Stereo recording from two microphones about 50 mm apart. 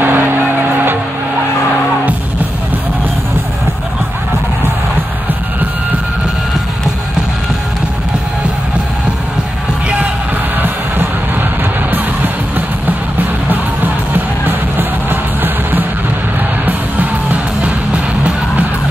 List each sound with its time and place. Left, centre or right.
0.0 s music: right
14.1 s music: right
16.6 s music: right